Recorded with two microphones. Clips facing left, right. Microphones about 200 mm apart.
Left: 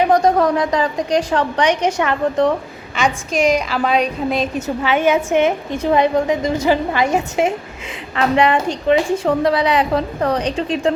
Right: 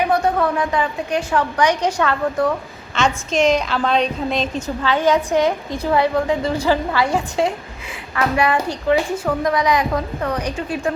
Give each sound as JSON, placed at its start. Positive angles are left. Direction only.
{"t": 0.1, "sound": "a woman's voice", "side_deg": 40}
{"t": 1.8, "sound": "a woman's voice", "side_deg": 15}
{"t": 4.5, "sound": "a woman's voice", "side_deg": 20}
{"t": 8.1, "sound": "a woman's voice", "side_deg": 25}